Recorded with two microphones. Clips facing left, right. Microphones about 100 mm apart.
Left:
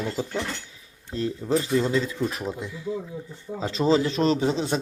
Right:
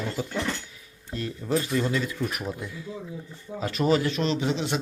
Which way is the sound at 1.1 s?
30° left (ahead or behind).